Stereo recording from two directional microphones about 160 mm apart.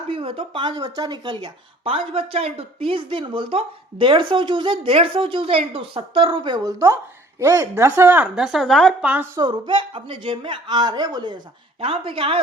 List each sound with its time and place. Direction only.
0.1 s speech: 35° right (ahead or behind); by 9.2 s 5° right (ahead or behind)
9.3 s speech: 25° right (ahead or behind)